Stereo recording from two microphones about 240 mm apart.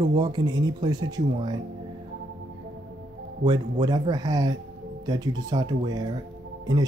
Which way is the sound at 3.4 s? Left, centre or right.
Centre.